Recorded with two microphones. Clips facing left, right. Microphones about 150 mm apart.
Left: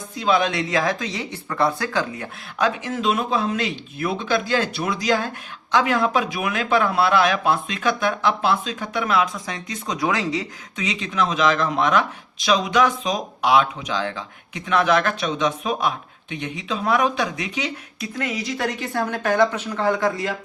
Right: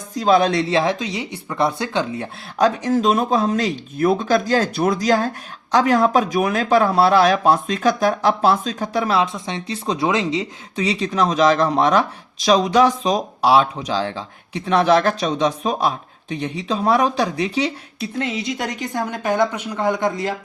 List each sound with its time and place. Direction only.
0.1 s speech: 40° right (ahead or behind); by 10.4 s 20° right (ahead or behind)
10.8 s speech: 35° right (ahead or behind)